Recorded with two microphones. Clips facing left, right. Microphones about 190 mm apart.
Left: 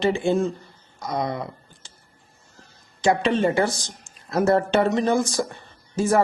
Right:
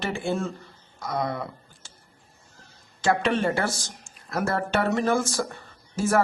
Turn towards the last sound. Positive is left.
turn(degrees=15)  # may be behind; listen again after turning